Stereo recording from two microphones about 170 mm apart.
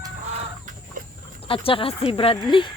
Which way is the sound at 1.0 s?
50° right (ahead or behind).